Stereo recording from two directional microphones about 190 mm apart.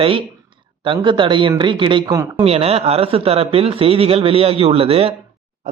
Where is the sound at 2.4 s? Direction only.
30° right (ahead or behind).